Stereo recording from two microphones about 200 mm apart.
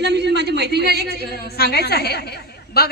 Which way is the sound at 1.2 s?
50° left (ahead or behind).